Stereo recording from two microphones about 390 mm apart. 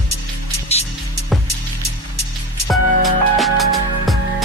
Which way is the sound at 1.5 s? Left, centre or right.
Right.